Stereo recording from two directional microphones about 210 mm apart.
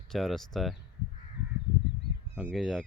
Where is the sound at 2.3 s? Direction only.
Centre (ahead or behind).